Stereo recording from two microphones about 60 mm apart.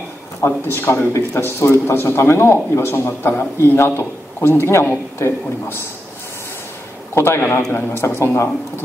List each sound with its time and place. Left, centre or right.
0.5 s a man's voice: left
7.2 s a man's voice: left